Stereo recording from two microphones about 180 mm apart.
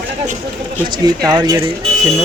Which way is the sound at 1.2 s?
20° right (ahead or behind).